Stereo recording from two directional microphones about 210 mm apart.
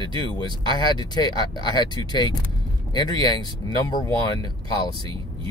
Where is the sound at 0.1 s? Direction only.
20° left (ahead or behind).